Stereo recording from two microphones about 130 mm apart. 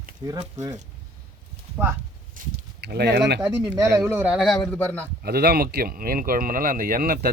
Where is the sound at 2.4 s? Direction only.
90° right.